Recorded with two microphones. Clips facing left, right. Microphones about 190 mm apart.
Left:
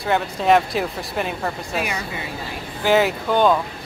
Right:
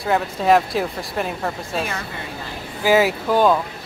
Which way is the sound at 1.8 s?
15° left (ahead or behind).